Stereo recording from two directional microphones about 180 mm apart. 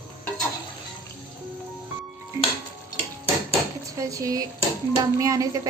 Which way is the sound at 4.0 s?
20° right (ahead or behind).